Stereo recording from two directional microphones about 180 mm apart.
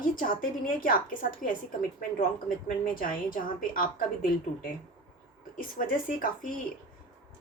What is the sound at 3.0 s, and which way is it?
Speech, 50° left (ahead or behind).